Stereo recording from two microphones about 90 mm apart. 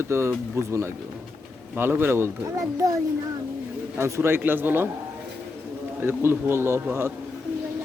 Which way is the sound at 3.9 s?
30° right (ahead or behind).